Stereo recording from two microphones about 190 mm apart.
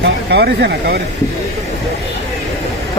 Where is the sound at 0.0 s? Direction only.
60° right (ahead or behind).